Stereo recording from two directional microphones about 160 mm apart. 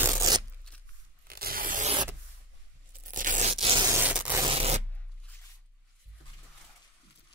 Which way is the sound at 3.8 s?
10° right (ahead or behind).